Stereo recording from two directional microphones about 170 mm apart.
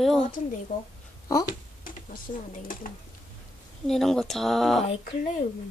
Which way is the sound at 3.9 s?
Centre (ahead or behind).